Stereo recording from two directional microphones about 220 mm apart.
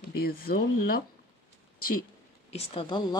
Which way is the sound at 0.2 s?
40° left (ahead or behind).